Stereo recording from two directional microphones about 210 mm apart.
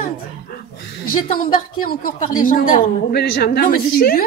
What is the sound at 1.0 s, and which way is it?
A woman's voice, 40° left (ahead or behind).